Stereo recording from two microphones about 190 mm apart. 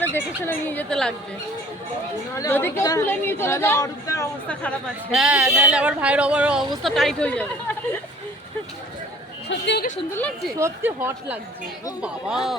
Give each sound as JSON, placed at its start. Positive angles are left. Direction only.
{"t": 0.0, "sound": "a woman's voice", "side_deg": 10}
{"t": 2.3, "sound": "a woman's voice", "side_deg": 15}
{"t": 5.1, "sound": "speech", "side_deg": -5}
{"t": 9.5, "sound": "a sound", "side_deg": 65}
{"t": 10.1, "sound": "a woman's voice", "side_deg": 10}
{"t": 10.6, "sound": "speech", "side_deg": -10}